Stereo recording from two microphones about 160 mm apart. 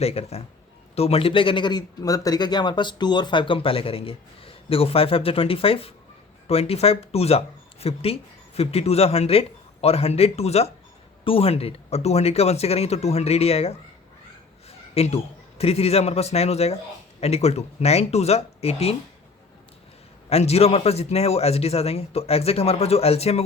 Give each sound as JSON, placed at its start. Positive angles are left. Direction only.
{"t": 0.0, "sound": "a man's voice", "side_deg": 40}
{"t": 20.3, "sound": "speech", "side_deg": 40}